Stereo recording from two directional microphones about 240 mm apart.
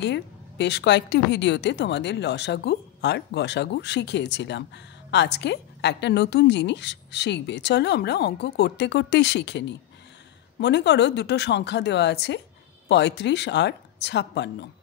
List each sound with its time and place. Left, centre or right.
0.0 s a woman's voice: left